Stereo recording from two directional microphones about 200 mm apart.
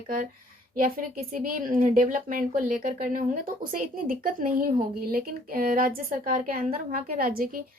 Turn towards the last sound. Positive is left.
turn(degrees=-45)  # may be behind; listen again after turning